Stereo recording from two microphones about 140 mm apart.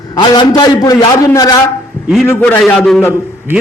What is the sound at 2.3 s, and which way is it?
Speech, 15° left (ahead or behind).